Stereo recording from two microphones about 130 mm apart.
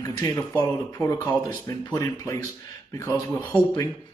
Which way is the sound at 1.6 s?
25° left (ahead or behind).